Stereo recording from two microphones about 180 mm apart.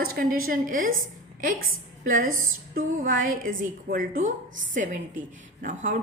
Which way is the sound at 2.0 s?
50° right (ahead or behind).